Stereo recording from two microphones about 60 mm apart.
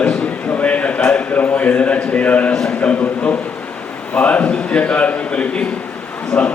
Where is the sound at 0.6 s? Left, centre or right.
Left.